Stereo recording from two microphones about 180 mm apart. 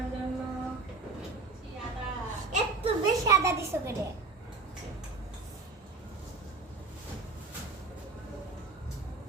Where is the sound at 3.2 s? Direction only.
15° right (ahead or behind).